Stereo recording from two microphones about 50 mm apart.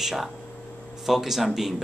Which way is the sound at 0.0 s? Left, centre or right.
Centre.